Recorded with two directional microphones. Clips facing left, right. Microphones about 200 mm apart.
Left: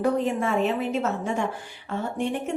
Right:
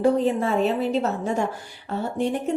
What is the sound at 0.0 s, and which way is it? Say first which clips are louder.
A woman's voice: right 3 dB; 35° right (ahead or behind).